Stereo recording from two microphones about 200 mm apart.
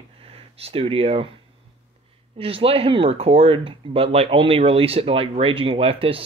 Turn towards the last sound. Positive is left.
turn(degrees=-30)  # may be behind; listen again after turning